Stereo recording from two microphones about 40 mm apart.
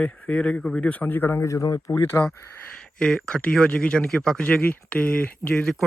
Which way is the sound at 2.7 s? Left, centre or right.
Left.